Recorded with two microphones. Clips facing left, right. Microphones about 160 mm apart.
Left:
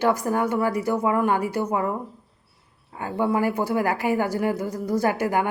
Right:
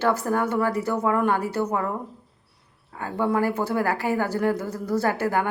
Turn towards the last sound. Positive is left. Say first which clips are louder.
# left 1 dB
turn(degrees=15)  # may be behind; listen again after turning